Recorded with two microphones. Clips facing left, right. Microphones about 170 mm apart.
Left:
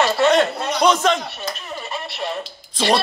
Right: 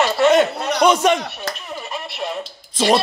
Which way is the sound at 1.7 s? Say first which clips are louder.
Even; centre (ahead or behind).